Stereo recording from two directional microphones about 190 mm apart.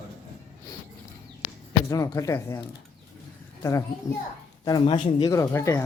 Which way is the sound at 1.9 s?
15° left (ahead or behind).